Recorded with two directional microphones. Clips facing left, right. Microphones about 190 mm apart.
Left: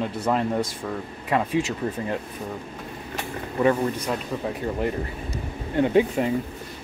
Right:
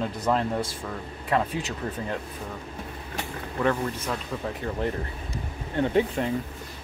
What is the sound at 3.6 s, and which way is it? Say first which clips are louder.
Speech: left 4 dB; 15° left (ahead or behind).